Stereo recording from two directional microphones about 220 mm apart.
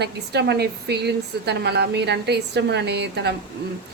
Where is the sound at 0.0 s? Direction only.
50° right (ahead or behind).